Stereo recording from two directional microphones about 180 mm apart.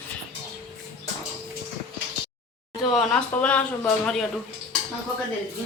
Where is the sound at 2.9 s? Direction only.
5° left (ahead or behind).